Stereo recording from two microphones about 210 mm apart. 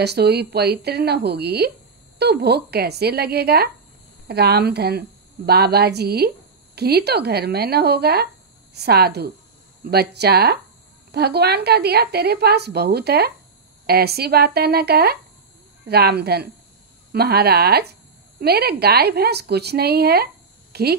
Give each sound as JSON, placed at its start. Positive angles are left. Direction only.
{"t": 0.0, "sound": "a woman's voice", "side_deg": -50}